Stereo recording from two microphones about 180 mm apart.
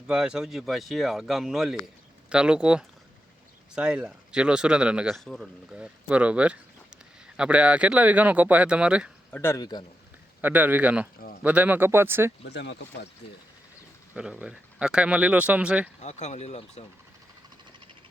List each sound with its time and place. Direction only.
0.1 s a man's voice: 5° right (ahead or behind)
9.3 s a man's voice: 15° left (ahead or behind)
10.4 s speech: 10° right (ahead or behind)
12.5 s speech: 70° left (ahead or behind)
14.1 s speech: 5° right (ahead or behind)
16.0 s speech: 40° left (ahead or behind)